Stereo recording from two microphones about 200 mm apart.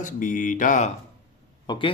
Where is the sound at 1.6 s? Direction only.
25° left (ahead or behind).